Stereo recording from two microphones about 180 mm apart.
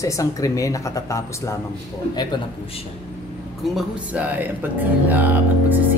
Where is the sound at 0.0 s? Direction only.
15° left (ahead or behind).